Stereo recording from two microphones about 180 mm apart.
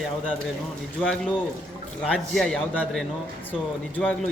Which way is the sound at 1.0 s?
5° left (ahead or behind).